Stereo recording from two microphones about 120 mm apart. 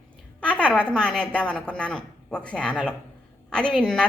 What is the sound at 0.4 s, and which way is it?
A woman's voice, 10° left (ahead or behind).